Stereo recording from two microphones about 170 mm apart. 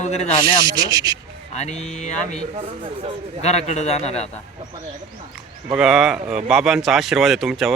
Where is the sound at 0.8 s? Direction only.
25° right (ahead or behind).